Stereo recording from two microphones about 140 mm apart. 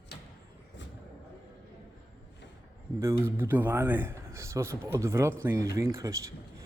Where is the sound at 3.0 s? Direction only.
20° right (ahead or behind).